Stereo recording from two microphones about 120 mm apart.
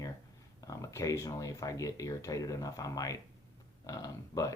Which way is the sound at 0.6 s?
30° left (ahead or behind).